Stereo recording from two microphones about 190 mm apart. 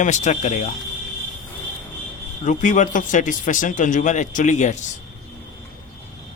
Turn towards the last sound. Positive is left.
turn(degrees=40)  # may be behind; listen again after turning